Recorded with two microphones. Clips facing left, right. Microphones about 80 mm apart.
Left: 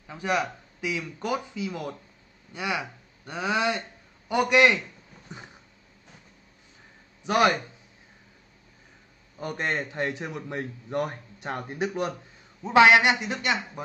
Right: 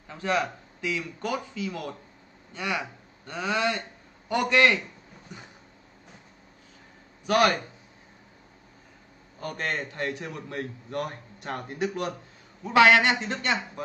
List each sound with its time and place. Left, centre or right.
0.1 s a man's voice: centre
7.2 s a man's voice: left
9.4 s a man's voice: left